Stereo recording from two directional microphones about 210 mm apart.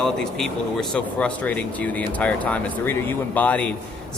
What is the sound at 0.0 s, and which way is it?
A man's voice, centre (ahead or behind).